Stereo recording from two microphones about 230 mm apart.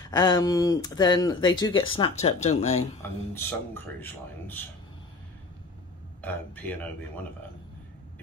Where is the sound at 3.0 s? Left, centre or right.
Centre.